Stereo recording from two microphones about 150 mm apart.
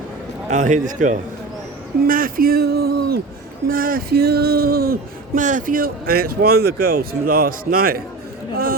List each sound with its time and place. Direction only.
0.5 s a man's voice: 55° right (ahead or behind)
2.0 s speech: 70° right (ahead or behind); by 3.2 s 90° right
3.7 s speech: 70° right (ahead or behind)